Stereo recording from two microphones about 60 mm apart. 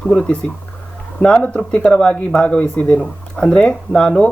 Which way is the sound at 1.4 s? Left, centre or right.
Left.